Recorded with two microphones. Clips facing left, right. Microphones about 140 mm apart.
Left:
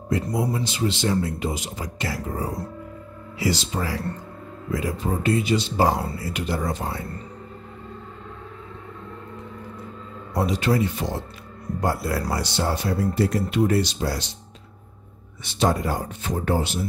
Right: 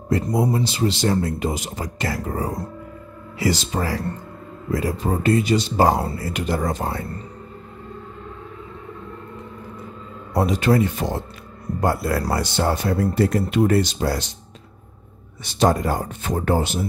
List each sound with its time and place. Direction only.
0.1 s speech: 40° right (ahead or behind)
10.3 s speech: 50° right (ahead or behind)
15.4 s speech: 40° right (ahead or behind)